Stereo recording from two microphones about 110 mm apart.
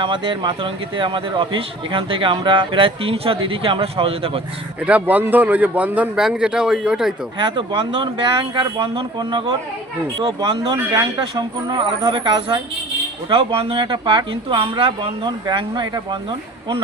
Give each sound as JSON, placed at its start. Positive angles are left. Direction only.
{"t": 0.0, "sound": "speech", "side_deg": -50}
{"t": 4.9, "sound": "speech", "side_deg": -15}
{"t": 7.3, "sound": "speech", "side_deg": -45}
{"t": 11.8, "sound": "speech", "side_deg": -45}
{"t": 13.3, "sound": "speech", "side_deg": -55}
{"t": 14.6, "sound": "speech", "side_deg": -55}